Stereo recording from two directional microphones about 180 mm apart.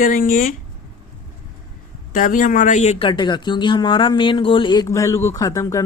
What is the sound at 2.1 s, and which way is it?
Speech, 45° left (ahead or behind).